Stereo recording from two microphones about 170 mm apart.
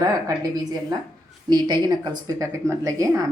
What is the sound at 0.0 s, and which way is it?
Speech, 20° right (ahead or behind).